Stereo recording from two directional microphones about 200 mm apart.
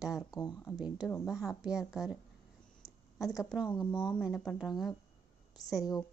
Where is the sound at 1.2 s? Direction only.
5° right (ahead or behind).